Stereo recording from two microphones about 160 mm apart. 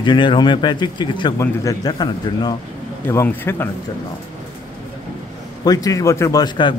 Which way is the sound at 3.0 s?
15° left (ahead or behind).